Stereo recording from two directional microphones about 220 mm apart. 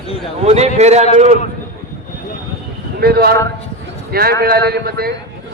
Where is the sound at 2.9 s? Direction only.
45° right (ahead or behind).